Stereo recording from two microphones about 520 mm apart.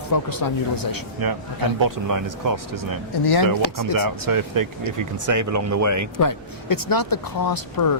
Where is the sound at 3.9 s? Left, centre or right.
Right.